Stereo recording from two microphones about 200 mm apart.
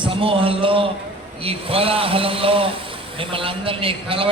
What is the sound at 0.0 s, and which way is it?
A man's voice, 25° right (ahead or behind).